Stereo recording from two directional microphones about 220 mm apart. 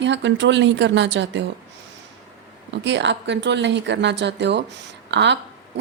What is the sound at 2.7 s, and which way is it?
A woman's voice, 55° right (ahead or behind).